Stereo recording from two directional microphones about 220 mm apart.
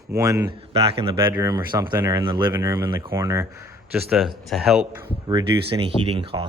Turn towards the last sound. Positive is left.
turn(degrees=-25)  # may be behind; listen again after turning